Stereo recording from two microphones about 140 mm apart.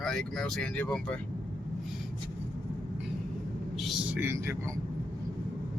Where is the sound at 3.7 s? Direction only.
Centre (ahead or behind); by 4.5 s 20° right (ahead or behind).